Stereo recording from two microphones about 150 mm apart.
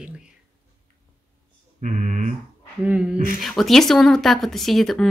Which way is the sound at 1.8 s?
55° right (ahead or behind).